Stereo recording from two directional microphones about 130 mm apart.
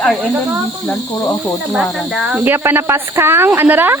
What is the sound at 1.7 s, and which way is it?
Speech, centre (ahead or behind).